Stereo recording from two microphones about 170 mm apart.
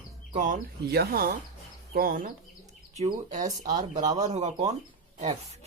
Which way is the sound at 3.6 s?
25° right (ahead or behind).